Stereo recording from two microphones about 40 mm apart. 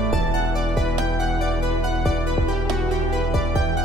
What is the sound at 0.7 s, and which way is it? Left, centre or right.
Music, centre.